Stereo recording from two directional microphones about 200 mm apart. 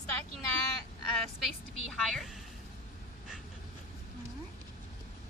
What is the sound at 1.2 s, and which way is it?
Speech, centre (ahead or behind).